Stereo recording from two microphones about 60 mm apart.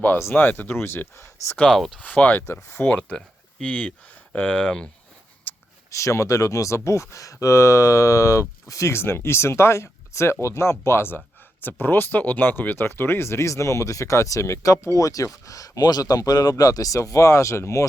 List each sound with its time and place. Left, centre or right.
0.3 s speech: left
1.7 s speech: centre
2.0 s speech: left
2.5 s speech: left
3.2 s speech: centre
5.5 s a sound: left
5.9 s speech: left
8.9 s speech: left
17.0 s speech: left